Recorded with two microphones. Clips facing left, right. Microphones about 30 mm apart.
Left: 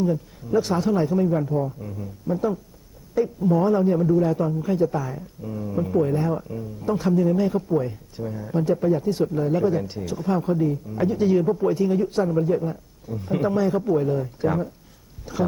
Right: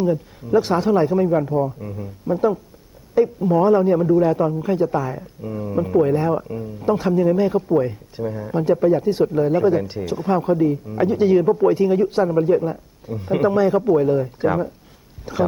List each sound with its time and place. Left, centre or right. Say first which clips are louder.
0.0 s a man's voice: right 3 dB; right